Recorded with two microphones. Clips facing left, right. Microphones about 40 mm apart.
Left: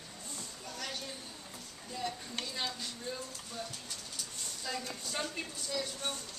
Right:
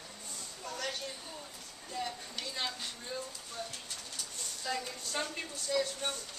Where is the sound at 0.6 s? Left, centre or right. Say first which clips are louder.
Right 5 dB; centre.